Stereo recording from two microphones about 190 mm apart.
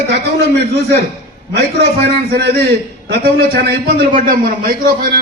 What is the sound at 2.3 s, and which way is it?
A man's voice, 55° right (ahead or behind).